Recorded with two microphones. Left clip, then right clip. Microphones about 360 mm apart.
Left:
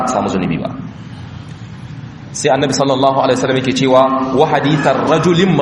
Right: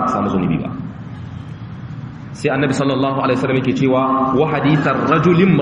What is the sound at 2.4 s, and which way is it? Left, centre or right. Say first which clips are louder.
A man's voice: left 4 dB; centre.